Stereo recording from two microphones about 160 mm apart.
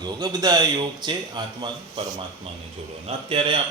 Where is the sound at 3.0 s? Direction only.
35° right (ahead or behind).